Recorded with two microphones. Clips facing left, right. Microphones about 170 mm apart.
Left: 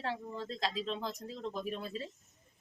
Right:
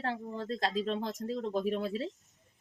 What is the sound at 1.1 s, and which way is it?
Speech, 65° right (ahead or behind).